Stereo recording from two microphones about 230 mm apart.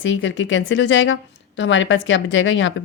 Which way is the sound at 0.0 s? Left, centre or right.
Left.